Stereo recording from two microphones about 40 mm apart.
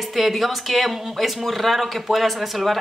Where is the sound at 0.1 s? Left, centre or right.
Centre.